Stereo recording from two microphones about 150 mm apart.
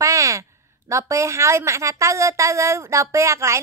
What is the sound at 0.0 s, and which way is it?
A woman's voice, 20° right (ahead or behind).